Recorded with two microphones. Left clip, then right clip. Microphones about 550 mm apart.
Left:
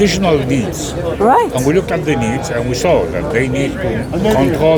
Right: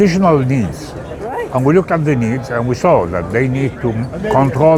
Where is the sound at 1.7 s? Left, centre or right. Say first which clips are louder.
Right 1 dB; right.